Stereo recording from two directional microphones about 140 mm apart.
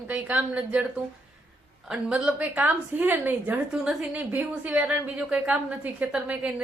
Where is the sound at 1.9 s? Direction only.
5° right (ahead or behind).